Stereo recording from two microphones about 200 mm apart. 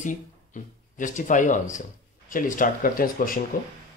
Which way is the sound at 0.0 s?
40° left (ahead or behind).